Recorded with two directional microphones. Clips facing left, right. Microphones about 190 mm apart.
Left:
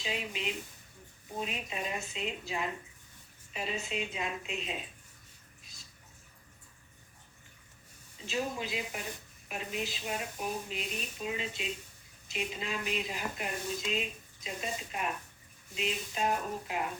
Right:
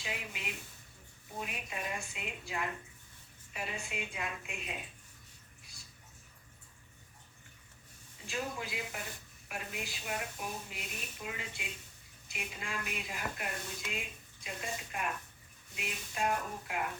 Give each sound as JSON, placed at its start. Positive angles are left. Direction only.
{"t": 0.0, "sound": "speech", "side_deg": 25}
{"t": 8.3, "sound": "speech", "side_deg": 20}